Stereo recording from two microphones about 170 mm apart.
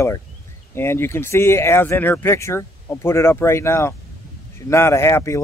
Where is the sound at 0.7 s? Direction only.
15° left (ahead or behind).